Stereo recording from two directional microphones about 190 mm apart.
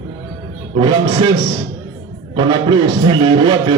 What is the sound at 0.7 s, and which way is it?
Music, 25° right (ahead or behind).